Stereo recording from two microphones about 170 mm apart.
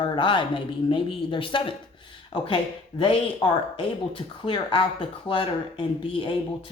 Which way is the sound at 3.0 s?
30° left (ahead or behind).